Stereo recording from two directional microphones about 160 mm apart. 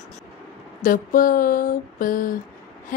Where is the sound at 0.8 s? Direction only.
60° left (ahead or behind).